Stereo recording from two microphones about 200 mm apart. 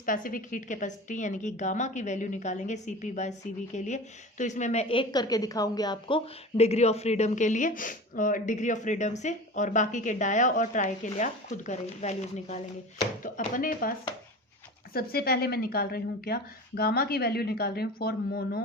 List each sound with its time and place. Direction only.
0.0 s a woman's voice: 45° left (ahead or behind)
14.9 s a woman's voice: 50° left (ahead or behind)